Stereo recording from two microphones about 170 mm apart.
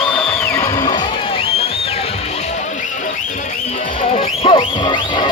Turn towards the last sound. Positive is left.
turn(degrees=30)  # may be behind; listen again after turning